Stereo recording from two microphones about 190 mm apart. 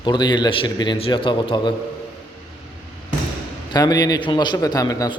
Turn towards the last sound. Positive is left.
turn(degrees=20)  # may be behind; listen again after turning